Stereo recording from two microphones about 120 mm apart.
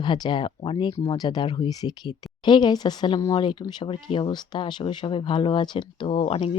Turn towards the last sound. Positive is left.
turn(degrees=50)  # may be behind; listen again after turning